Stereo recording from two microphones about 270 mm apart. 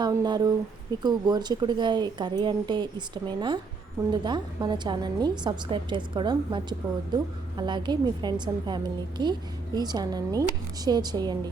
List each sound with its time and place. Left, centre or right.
0.0 s a woman's voice: centre